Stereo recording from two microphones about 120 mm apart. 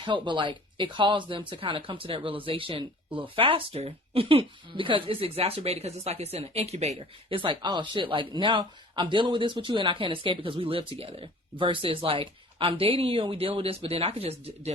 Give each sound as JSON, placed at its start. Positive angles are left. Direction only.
{"t": 0.0, "sound": "speech", "side_deg": -40}
{"t": 7.3, "sound": "speech", "side_deg": -40}